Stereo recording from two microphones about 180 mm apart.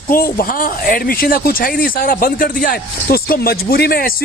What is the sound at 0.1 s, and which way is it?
Speech, 55° left (ahead or behind).